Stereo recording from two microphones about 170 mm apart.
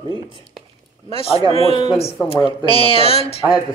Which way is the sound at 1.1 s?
35° left (ahead or behind).